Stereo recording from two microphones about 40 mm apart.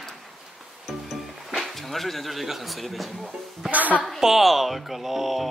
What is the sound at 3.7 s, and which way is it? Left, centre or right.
Speech, right.